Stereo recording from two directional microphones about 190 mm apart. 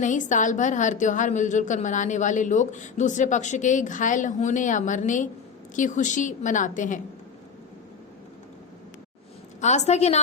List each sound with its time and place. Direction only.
0.0 s a woman's voice: 40° left (ahead or behind)
9.6 s a woman's voice: 35° left (ahead or behind)